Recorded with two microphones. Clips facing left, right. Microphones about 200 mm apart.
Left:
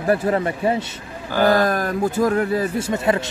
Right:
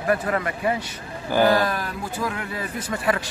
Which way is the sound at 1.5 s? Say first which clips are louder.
Left 4 dB; 45° left (ahead or behind).